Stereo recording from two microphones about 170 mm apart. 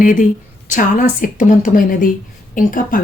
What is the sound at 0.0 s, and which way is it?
A woman's voice, 50° left (ahead or behind).